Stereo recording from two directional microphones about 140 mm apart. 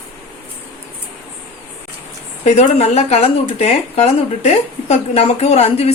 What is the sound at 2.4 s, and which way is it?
Speech, 50° left (ahead or behind).